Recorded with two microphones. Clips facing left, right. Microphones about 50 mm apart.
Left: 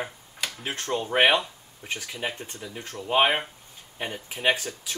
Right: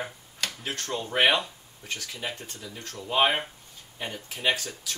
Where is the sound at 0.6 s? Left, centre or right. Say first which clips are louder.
Left 6 dB; left.